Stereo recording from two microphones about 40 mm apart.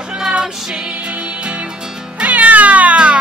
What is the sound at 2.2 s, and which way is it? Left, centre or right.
Cat, right.